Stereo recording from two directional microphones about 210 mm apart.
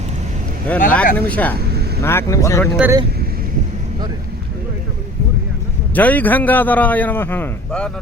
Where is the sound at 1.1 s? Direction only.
5° left (ahead or behind).